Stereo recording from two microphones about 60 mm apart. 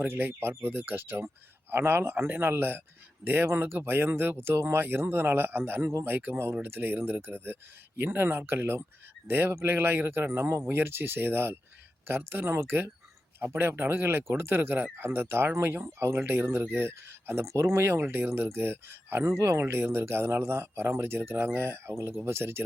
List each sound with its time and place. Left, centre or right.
0.0 s speech: right
6.3 s speech: right